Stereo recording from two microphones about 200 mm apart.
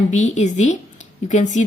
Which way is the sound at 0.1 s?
35° left (ahead or behind).